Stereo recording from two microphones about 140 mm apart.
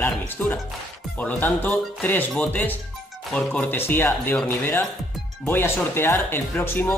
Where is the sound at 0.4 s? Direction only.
10° left (ahead or behind).